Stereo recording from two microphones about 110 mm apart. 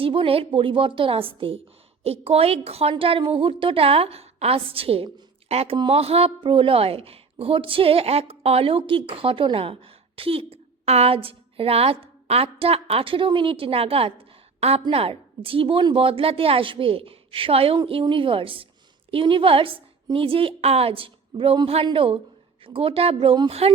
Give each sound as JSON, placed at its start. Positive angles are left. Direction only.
{"t": 0.0, "sound": "a woman's voice", "side_deg": -55}
{"t": 2.0, "sound": "a woman's voice", "side_deg": -65}
{"t": 2.9, "sound": "a woman's voice", "side_deg": -55}
{"t": 5.5, "sound": "speech", "side_deg": -70}
{"t": 5.7, "sound": "a woman's voice", "side_deg": -45}
{"t": 6.0, "sound": "a woman's voice", "side_deg": -65}